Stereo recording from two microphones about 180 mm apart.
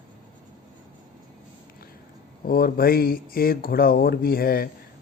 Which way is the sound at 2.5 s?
55° left (ahead or behind).